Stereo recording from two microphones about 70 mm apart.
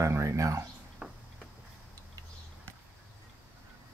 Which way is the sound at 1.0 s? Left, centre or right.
Centre.